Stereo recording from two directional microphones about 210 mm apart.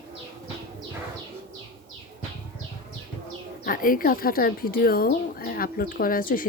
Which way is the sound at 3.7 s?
40° left (ahead or behind).